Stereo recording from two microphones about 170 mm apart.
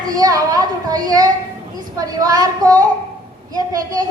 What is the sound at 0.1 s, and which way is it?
A woman's voice, 20° right (ahead or behind).